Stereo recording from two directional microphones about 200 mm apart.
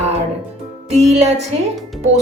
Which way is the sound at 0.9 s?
35° right (ahead or behind).